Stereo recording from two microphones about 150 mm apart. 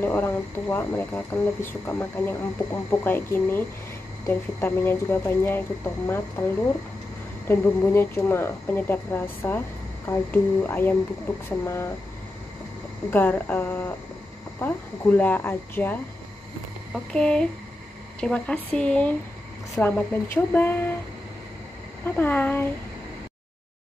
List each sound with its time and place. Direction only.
0.0 s speech: 15° left (ahead or behind)
7.4 s speech: 15° left (ahead or behind)
13.1 s speech: 15° left (ahead or behind)
22.0 s speech: 15° left (ahead or behind)